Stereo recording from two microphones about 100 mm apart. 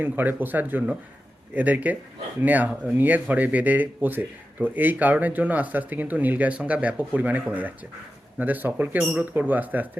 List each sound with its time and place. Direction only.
0.0 s speech: 20° right (ahead or behind)